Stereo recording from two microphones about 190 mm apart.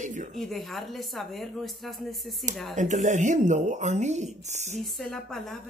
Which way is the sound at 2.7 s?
40° right (ahead or behind).